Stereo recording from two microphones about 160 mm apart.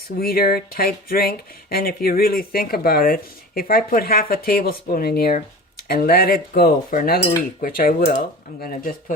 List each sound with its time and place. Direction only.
0.2 s speech: 70° left (ahead or behind)
8.0 s speech: 50° left (ahead or behind)